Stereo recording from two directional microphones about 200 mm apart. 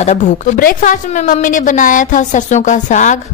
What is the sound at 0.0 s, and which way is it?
A woman's voice, 35° left (ahead or behind).